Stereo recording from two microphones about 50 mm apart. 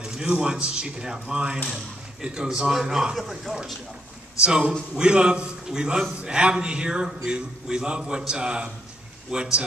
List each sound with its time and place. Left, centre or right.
0.0 s speech: centre
4.4 s a man's voice: centre